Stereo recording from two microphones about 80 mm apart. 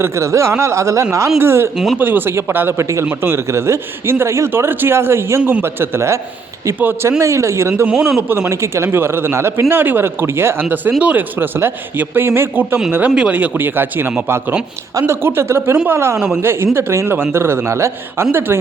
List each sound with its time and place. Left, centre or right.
0.0 s a man's voice: right
1.7 s speech: centre
2.0 s speech: right
2.8 s a man's voice: right
7.2 s a man's voice: right
7.9 s a man's voice: centre
8.3 s a man's voice: right